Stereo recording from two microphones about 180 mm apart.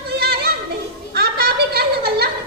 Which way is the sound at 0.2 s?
60° right (ahead or behind).